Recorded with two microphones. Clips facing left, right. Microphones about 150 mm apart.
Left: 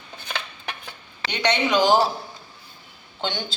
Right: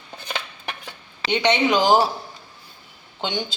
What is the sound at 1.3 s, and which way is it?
Speech, 20° right (ahead or behind).